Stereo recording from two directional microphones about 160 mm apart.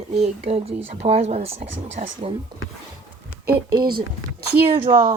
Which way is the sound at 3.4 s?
70° right (ahead or behind).